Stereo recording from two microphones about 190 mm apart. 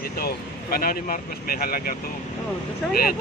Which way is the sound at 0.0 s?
55° left (ahead or behind).